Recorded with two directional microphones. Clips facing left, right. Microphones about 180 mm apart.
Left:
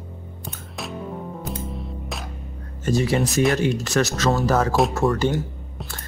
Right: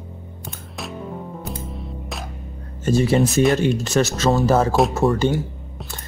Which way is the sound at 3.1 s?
25° right (ahead or behind).